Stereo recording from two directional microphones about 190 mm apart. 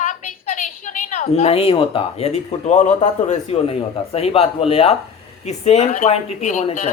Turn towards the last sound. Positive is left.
turn(degrees=35)  # may be behind; listen again after turning